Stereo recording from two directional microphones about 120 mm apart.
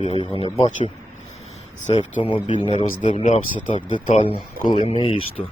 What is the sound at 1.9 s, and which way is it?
Speech, 70° left (ahead or behind).